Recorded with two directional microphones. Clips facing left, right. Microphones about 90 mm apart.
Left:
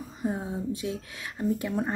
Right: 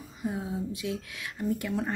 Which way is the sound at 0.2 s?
35° left (ahead or behind).